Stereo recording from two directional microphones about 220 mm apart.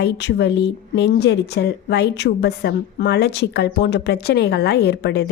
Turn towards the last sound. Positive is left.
turn(degrees=50)  # may be behind; listen again after turning